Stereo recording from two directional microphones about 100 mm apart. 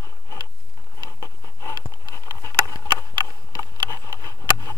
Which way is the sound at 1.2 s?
30° left (ahead or behind).